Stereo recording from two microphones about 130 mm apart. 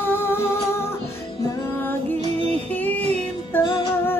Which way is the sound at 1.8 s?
15° left (ahead or behind).